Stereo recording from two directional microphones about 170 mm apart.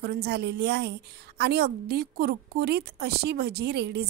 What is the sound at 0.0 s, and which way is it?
A woman's voice, 70° right (ahead or behind).